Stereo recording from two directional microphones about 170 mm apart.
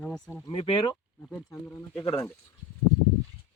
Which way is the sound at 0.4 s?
35° left (ahead or behind).